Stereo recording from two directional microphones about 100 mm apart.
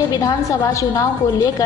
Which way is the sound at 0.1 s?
30° left (ahead or behind).